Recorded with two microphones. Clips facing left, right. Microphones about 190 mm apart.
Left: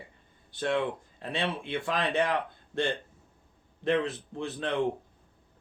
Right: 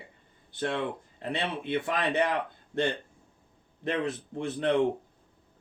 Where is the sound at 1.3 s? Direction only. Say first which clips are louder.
Right 1 dB; 20° right (ahead or behind).